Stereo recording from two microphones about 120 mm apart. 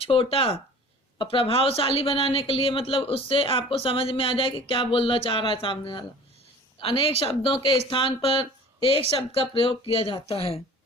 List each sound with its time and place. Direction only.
0.0 s a woman's voice: 50° left (ahead or behind)